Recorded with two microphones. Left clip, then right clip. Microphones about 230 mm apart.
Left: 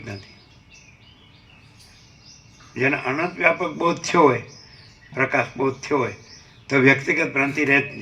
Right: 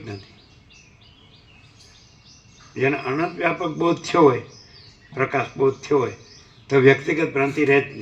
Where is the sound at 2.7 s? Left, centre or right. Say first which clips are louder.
Even; left.